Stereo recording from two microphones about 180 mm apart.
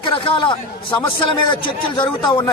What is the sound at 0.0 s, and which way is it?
A man's voice, 25° left (ahead or behind).